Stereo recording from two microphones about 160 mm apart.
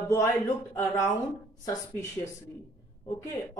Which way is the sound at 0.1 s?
20° left (ahead or behind).